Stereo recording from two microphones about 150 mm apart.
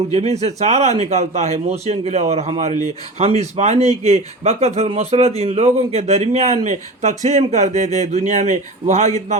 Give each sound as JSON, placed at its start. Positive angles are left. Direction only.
{"t": 0.1, "sound": "a man's voice", "side_deg": -45}